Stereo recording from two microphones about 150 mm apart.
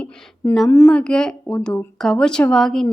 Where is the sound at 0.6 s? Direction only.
15° left (ahead or behind).